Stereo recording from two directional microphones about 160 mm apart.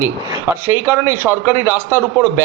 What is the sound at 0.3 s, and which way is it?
A man's voice, 15° right (ahead or behind).